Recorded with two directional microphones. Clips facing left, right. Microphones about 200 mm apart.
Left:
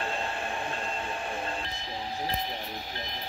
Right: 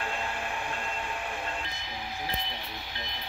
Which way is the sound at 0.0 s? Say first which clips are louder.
Left 2 dB; 30° left (ahead or behind).